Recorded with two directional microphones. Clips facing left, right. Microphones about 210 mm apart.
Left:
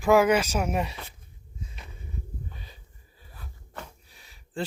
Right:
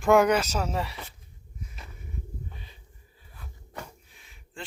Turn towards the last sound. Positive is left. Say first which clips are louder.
# left 10 dB
turn(degrees=35)  # may be behind; listen again after turning